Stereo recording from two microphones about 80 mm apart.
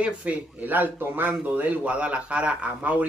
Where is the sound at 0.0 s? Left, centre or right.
Centre.